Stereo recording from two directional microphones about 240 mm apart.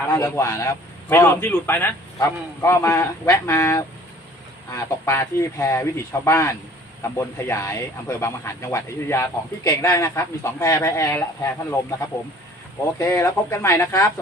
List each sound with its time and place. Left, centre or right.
0.1 s speech: centre
13.0 s speech: centre